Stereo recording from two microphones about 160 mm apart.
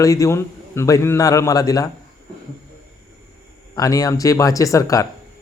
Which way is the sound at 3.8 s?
25° left (ahead or behind).